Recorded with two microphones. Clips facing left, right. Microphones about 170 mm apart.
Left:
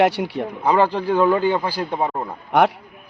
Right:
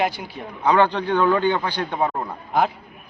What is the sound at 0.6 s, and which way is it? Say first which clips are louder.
Speech: even; 5° left (ahead or behind).